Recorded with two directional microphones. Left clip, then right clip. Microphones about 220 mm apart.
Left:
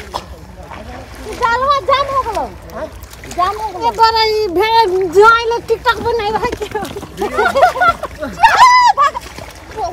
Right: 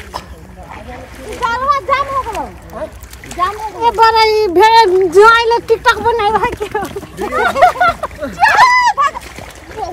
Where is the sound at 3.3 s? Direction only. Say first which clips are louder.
Left 1 dB; 40° left (ahead or behind).